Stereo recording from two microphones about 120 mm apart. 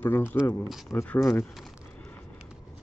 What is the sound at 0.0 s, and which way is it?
Speech, 20° left (ahead or behind).